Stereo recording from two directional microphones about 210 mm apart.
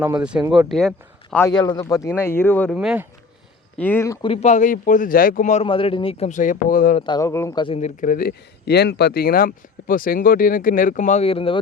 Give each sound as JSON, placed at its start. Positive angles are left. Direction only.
{"t": 0.2, "sound": "speech", "side_deg": -5}
{"t": 1.5, "sound": "speech", "side_deg": 20}
{"t": 2.7, "sound": "speech", "side_deg": -5}
{"t": 3.8, "sound": "speech", "side_deg": 10}
{"t": 4.3, "sound": "speech", "side_deg": 30}
{"t": 7.0, "sound": "speech", "side_deg": 20}